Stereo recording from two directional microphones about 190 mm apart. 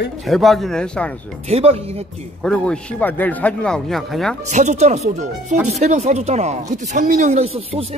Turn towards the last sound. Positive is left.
turn(degrees=-30)  # may be behind; listen again after turning